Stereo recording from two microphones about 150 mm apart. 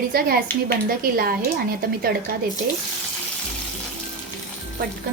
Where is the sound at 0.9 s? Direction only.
80° right.